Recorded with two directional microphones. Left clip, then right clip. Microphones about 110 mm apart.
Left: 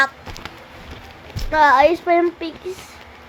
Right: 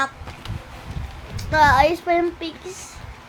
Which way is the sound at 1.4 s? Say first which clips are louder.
Left 2 dB; 5° left (ahead or behind).